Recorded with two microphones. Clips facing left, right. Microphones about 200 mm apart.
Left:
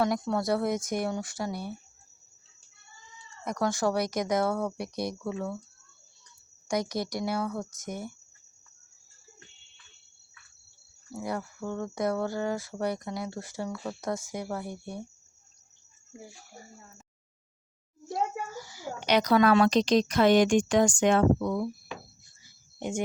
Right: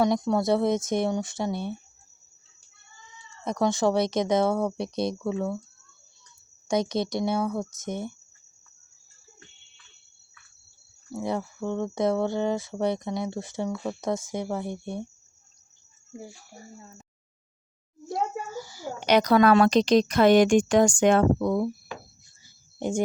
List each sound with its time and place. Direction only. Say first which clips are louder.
0.0 s speech: right 4 dB; 20° right (ahead or behind)
3.4 s speech: right 4 dB; 25° right (ahead or behind)
6.7 s speech: right 4 dB; 25° right (ahead or behind)
11.2 s speech: right 4 dB; 25° right (ahead or behind)
18.1 s a child's voice: right 2 dB; 30° right (ahead or behind)
22.4 s a sound: right 5 dB; 35° right (ahead or behind)